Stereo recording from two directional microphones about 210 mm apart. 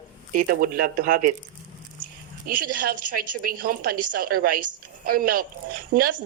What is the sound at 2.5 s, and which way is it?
A woman's voice, 45° right (ahead or behind).